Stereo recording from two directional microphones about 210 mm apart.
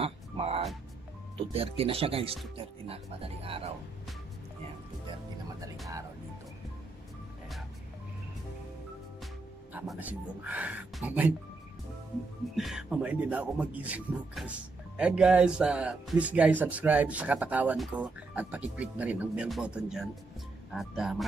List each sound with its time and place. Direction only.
0.0 s music: 30° right (ahead or behind)
1.5 s speech: 25° right (ahead or behind)
9.8 s speech: 5° right (ahead or behind)
12.5 s speech: centre (ahead or behind)